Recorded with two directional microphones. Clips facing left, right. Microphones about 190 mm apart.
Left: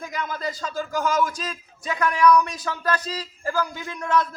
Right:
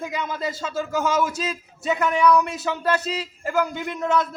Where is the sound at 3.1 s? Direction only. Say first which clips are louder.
Right 3 dB; 20° right (ahead or behind).